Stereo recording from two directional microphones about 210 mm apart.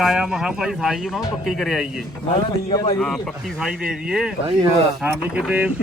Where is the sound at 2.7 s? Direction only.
20° left (ahead or behind).